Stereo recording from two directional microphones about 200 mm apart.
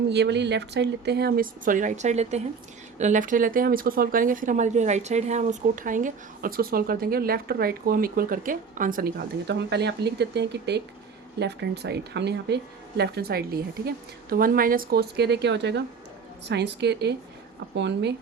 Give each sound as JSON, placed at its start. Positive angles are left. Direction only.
{"t": 0.1, "sound": "speech", "side_deg": -60}